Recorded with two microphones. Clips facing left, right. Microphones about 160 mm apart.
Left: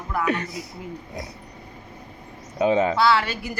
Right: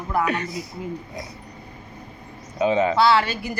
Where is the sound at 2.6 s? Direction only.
40° left (ahead or behind).